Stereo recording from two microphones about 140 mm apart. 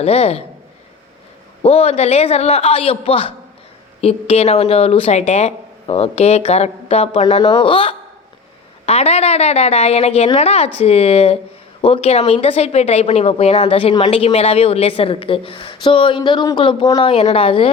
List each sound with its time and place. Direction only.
0.0 s speech: 45° left (ahead or behind)
1.6 s a woman's voice: 45° left (ahead or behind)